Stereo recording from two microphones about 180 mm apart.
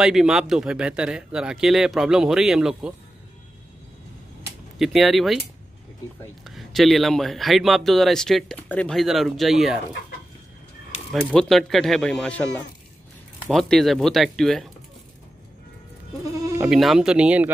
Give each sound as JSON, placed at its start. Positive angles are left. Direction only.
{"t": 0.0, "sound": "speech", "side_deg": -5}
{"t": 4.4, "sound": "a sound", "side_deg": 0}
{"t": 6.4, "sound": "speech", "side_deg": 0}
{"t": 11.1, "sound": "speech", "side_deg": 0}
{"t": 16.3, "sound": "bleat", "side_deg": -20}
{"t": 16.6, "sound": "speech", "side_deg": 0}